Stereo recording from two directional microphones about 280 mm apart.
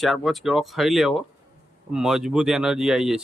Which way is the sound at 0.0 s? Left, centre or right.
Centre.